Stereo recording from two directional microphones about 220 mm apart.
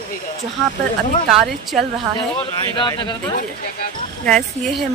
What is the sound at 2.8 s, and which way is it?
Speech, 20° left (ahead or behind).